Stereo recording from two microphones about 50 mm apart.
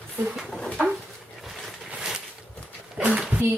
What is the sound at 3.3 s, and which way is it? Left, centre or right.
Speech, right.